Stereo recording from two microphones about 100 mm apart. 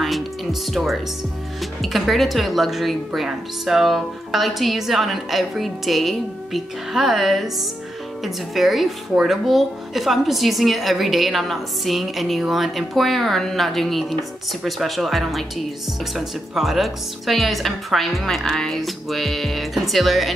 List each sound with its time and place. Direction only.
0.0 s speech: centre (ahead or behind)